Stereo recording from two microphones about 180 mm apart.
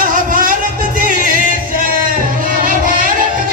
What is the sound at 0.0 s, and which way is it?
Music, 50° right (ahead or behind).